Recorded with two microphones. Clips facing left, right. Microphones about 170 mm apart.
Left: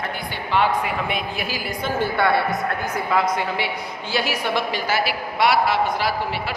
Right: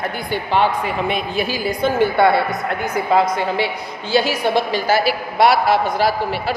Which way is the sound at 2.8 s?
30° right (ahead or behind).